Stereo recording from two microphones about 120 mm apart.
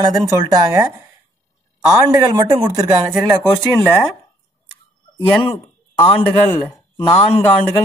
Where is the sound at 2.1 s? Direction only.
30° right (ahead or behind).